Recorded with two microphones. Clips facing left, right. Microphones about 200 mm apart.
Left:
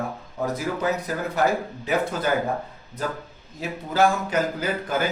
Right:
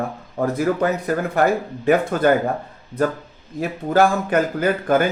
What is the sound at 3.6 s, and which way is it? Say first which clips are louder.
Speech: right 4 dB; 55° right (ahead or behind).